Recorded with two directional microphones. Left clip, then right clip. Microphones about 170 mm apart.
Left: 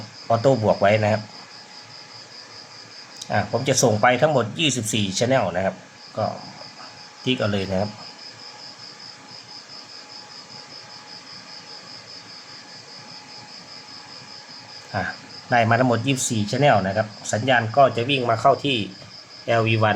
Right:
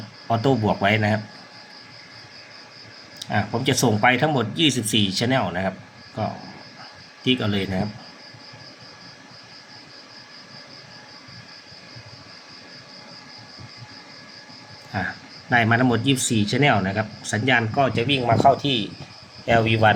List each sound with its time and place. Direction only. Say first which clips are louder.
0.3 s speech: left 3 dB; 20° left (ahead or behind)
3.2 s speech: left 2 dB; 15° left (ahead or behind)
14.9 s speech: left 1 dB; 15° left (ahead or behind)